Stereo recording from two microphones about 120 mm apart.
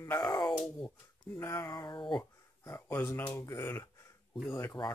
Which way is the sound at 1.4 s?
20° left (ahead or behind).